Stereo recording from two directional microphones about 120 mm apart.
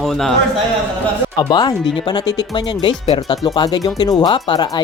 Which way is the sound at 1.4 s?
35° left (ahead or behind).